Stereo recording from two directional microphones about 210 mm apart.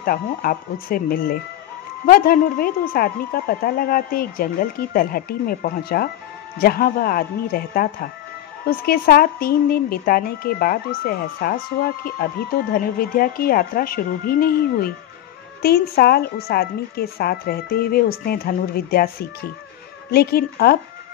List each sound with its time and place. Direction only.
0.0 s speech: 45° left (ahead or behind)
20.1 s speech: 50° left (ahead or behind)